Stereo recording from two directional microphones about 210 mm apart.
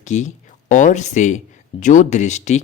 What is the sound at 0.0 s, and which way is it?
Speech, 35° left (ahead or behind).